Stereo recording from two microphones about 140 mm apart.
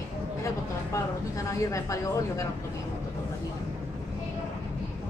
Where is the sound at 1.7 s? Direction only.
25° left (ahead or behind).